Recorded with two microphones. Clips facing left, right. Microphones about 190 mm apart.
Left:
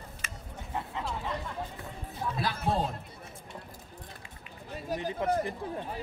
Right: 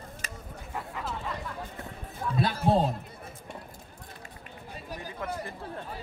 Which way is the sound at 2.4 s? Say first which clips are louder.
Right 6 dB; 35° right (ahead or behind).